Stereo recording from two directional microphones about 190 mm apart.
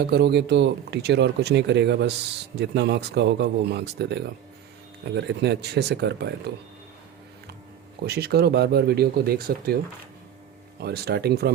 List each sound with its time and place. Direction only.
0.0 s speech: 60° right (ahead or behind)
8.0 s speech: 60° right (ahead or behind)
10.8 s speech: 55° right (ahead or behind)